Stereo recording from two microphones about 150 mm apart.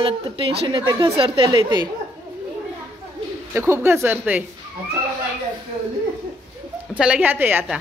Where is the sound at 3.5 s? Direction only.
15° right (ahead or behind).